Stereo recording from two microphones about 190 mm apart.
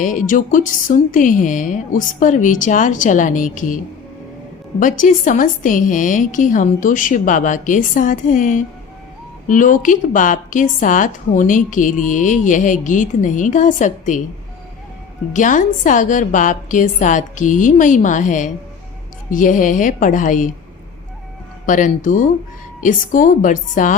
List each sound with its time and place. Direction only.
0.0 s a woman's voice: 45° left (ahead or behind)
4.8 s a woman's voice: 45° left (ahead or behind)
15.3 s a woman's voice: 40° left (ahead or behind)
21.7 s a woman's voice: 45° left (ahead or behind)